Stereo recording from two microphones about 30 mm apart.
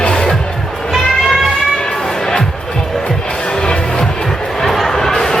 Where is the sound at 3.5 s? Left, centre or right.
Left.